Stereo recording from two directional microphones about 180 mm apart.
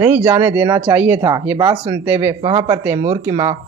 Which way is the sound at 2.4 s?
30° right (ahead or behind).